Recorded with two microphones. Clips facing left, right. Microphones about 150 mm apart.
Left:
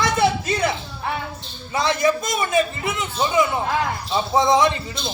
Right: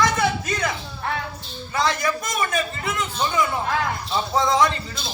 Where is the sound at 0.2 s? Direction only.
25° left (ahead or behind).